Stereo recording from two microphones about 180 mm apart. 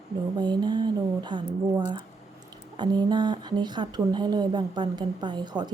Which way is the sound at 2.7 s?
25° right (ahead or behind).